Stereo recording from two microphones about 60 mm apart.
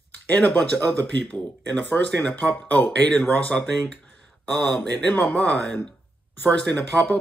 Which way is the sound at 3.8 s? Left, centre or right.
Left.